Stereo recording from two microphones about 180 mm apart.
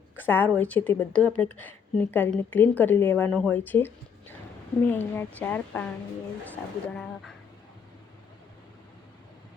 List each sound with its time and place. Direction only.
0.2 s a woman's voice: 10° left (ahead or behind)